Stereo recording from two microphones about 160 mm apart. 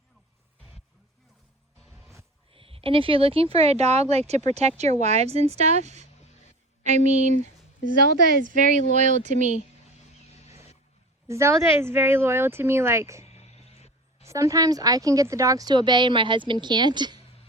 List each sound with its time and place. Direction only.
1.8 s music: 5° left (ahead or behind)
2.5 s speech: 35° right (ahead or behind)
8.4 s speech: 50° right (ahead or behind)
11.3 s speech: 15° right (ahead or behind)
13.2 s a sound: 40° left (ahead or behind)
14.3 s a woman's voice: 20° right (ahead or behind)